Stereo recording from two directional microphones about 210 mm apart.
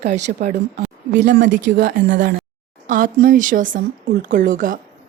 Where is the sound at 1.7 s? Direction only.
45° right (ahead or behind).